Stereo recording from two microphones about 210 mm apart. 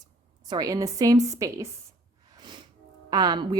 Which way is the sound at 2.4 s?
20° right (ahead or behind).